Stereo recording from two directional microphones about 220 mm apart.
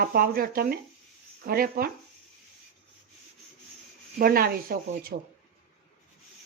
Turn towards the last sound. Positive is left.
turn(degrees=-40)  # may be behind; listen again after turning